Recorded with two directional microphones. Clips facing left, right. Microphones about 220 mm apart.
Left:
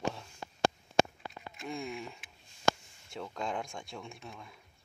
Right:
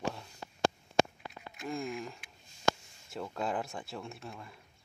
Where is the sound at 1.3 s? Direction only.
Centre (ahead or behind).